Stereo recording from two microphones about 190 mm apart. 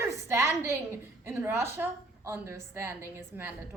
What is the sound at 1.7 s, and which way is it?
A woman's voice, 15° right (ahead or behind).